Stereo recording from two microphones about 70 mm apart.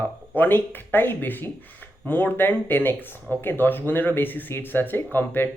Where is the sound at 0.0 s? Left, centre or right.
Left.